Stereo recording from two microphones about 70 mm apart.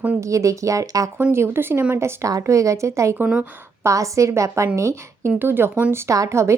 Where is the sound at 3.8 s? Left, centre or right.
Right.